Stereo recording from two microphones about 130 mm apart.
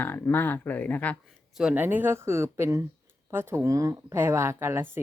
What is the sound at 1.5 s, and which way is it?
A woman's voice, 10° right (ahead or behind).